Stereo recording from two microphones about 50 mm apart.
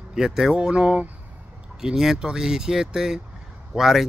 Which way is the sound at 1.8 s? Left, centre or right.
Centre.